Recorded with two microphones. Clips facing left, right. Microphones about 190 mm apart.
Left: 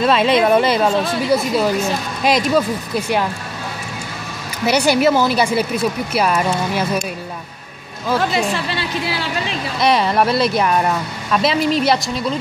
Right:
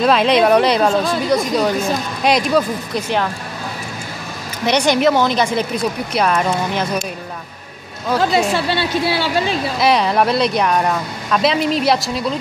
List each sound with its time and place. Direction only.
0.0 s speech: centre (ahead or behind)
4.6 s a woman's voice: 5° left (ahead or behind)
8.2 s a woman's voice: 30° right (ahead or behind)
9.8 s speech: centre (ahead or behind)